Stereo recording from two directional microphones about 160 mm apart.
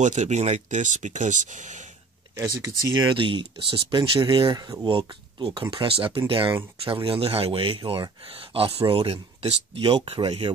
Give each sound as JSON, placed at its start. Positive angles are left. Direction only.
{"t": 0.0, "sound": "speech", "side_deg": -45}
{"t": 2.9, "sound": "speech", "side_deg": -30}